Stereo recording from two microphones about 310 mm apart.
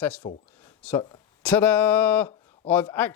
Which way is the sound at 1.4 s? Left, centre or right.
Centre.